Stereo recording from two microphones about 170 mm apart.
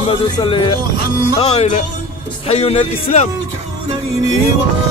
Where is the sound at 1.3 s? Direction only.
35° left (ahead or behind).